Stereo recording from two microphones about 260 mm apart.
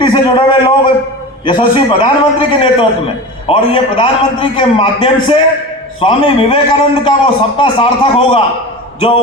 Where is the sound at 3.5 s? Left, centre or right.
Left.